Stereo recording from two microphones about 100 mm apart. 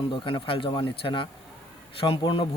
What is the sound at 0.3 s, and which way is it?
Speech, 60° left (ahead or behind).